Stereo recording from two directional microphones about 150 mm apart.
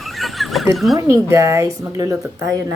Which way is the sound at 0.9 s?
20° right (ahead or behind).